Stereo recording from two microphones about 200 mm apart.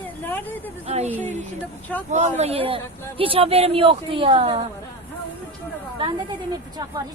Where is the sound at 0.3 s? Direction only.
10° left (ahead or behind).